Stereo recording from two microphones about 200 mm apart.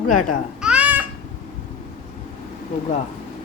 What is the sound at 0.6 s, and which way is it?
Babbling, 5° right (ahead or behind).